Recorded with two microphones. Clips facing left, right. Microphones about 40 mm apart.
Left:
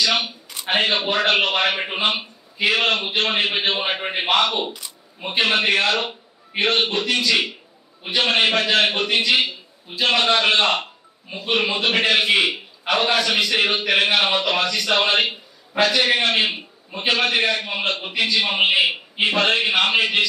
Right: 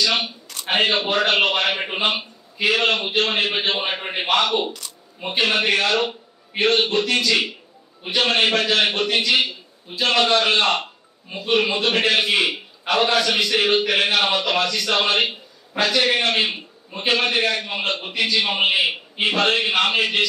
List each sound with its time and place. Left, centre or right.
0.0 s speech: centre
0.5 s a sound: centre
0.7 s a man's voice: centre